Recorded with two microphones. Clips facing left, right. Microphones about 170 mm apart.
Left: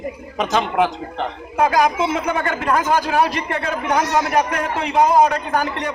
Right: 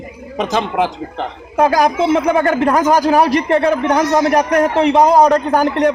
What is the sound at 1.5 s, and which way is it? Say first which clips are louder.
A man's voice: right 4 dB; 35° right (ahead or behind).